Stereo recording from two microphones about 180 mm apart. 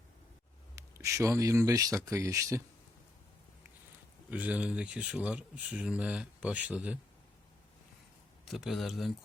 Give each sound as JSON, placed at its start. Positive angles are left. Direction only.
{"t": 0.8, "sound": "speech", "side_deg": -15}
{"t": 4.3, "sound": "speech", "side_deg": -5}
{"t": 8.4, "sound": "speech", "side_deg": 0}